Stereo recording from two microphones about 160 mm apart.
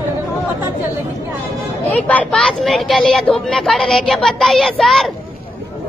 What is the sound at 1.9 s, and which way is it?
Speech, 10° left (ahead or behind).